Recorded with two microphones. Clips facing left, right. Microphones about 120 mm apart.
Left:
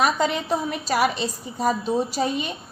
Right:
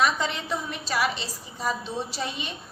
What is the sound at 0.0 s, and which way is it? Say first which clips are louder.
A woman's voice: left 4 dB; 45° left (ahead or behind).